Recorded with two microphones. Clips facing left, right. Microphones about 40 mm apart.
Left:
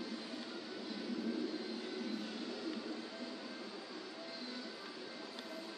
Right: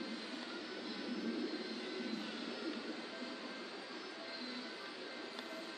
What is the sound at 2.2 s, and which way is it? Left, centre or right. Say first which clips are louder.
Train: even; centre.